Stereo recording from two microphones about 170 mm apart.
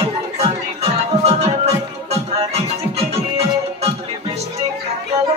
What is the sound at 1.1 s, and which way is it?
Music, 40° right (ahead or behind).